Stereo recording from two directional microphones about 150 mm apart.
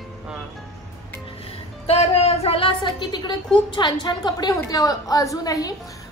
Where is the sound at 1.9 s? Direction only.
40° left (ahead or behind).